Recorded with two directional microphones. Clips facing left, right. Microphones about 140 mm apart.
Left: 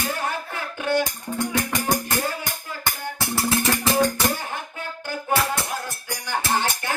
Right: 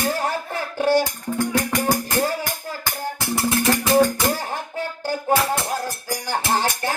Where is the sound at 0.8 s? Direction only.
35° right (ahead or behind).